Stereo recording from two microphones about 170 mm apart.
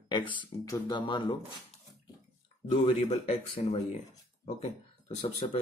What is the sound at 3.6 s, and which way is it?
Speech, 40° left (ahead or behind).